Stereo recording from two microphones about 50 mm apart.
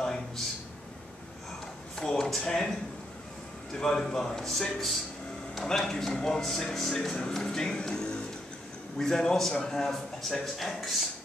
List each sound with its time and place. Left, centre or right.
2.0 s speech: centre
3.7 s a man's voice: centre